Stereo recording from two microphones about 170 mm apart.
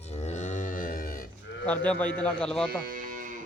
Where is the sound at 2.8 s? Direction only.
55° right (ahead or behind).